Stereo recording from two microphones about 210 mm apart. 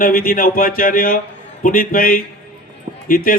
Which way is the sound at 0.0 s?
45° left (ahead or behind).